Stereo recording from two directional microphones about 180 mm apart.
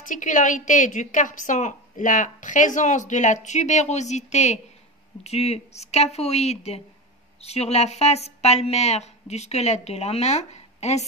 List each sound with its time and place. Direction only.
0.0 s a woman's voice: 45° left (ahead or behind)